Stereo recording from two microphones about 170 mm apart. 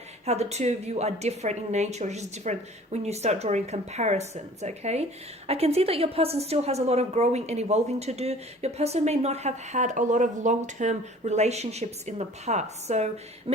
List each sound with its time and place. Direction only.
0.3 s a woman's voice: 40° right (ahead or behind)